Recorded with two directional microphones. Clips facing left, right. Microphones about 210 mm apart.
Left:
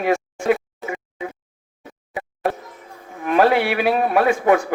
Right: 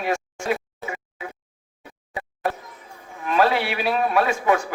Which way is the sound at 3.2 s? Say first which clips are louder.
Left 4 dB; 55° left (ahead or behind).